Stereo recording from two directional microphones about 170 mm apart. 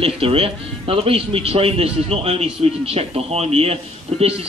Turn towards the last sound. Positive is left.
turn(degrees=-35)  # may be behind; listen again after turning